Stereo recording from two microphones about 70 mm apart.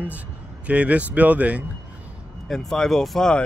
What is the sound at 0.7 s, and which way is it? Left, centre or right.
Speech, centre.